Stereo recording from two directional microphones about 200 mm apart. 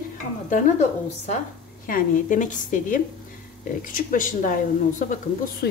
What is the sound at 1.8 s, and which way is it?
Speech, 45° left (ahead or behind).